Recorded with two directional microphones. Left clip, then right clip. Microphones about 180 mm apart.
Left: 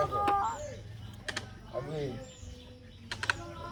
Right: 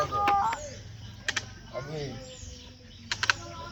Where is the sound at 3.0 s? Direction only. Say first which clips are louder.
Right 6 dB; 20° left (ahead or behind).